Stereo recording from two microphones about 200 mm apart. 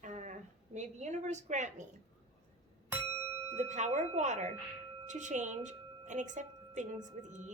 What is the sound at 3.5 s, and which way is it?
A woman's voice, 35° right (ahead or behind).